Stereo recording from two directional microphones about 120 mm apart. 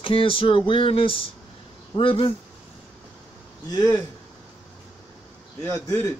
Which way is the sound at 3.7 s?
35° left (ahead or behind).